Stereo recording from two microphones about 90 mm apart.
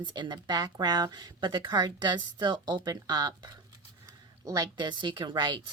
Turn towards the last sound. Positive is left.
turn(degrees=-60)  # may be behind; listen again after turning